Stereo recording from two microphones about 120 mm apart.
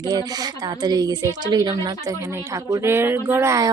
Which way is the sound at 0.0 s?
35° right (ahead or behind).